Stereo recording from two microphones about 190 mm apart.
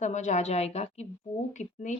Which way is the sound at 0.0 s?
40° left (ahead or behind).